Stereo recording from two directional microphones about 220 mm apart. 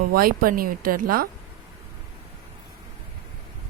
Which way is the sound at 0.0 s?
40° right (ahead or behind).